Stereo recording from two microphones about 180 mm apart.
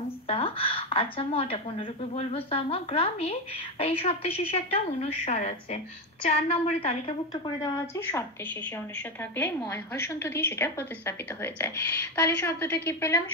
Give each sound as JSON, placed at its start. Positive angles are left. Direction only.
{"t": 0.3, "sound": "a woman's voice", "side_deg": 30}
{"t": 9.7, "sound": "a woman's voice", "side_deg": 15}